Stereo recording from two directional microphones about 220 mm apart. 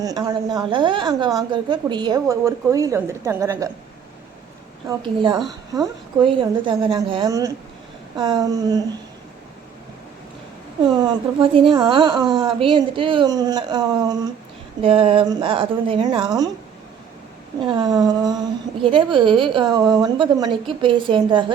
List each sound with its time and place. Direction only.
0.0 s a woman's voice: 15° right (ahead or behind)
4.9 s a woman's voice: 20° right (ahead or behind)
11.0 s a woman's voice: 25° right (ahead or behind)
17.7 s a woman's voice: 20° right (ahead or behind)